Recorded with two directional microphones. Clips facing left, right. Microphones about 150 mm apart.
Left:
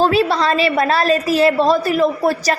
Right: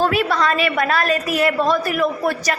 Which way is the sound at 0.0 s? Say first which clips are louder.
Left 3 dB; 30° left (ahead or behind).